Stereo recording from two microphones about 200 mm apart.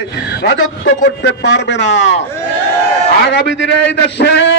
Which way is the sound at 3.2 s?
60° left (ahead or behind).